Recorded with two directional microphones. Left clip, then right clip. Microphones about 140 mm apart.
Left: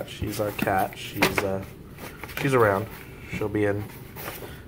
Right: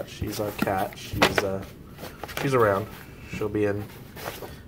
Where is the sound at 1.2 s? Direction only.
30° right (ahead or behind).